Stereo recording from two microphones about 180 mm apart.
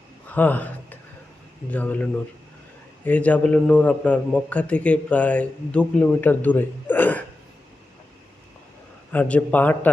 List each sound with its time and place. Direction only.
0.3 s speech: 10° left (ahead or behind)
9.1 s speech: 10° left (ahead or behind)